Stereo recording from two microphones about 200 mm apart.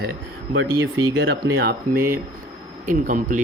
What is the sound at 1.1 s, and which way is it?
Speech, 60° right (ahead or behind).